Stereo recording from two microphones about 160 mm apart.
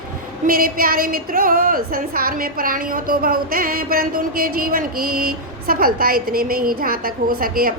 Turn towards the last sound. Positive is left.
turn(degrees=-65)  # may be behind; listen again after turning